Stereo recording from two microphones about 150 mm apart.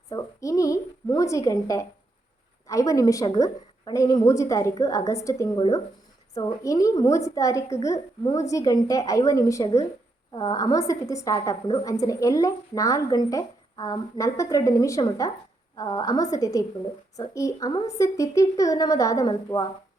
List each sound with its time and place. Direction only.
0.1 s a sound: 25° left (ahead or behind)
2.6 s a woman's voice: 20° left (ahead or behind)
5.5 s a woman's voice: 30° left (ahead or behind)